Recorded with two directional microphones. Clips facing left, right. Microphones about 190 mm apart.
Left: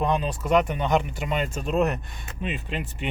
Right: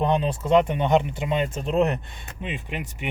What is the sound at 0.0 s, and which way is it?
Speech, 25° right (ahead or behind).